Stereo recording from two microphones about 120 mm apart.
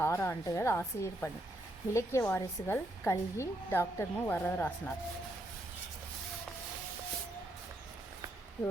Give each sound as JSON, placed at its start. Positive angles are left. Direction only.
{"t": 0.0, "sound": "speech", "side_deg": 20}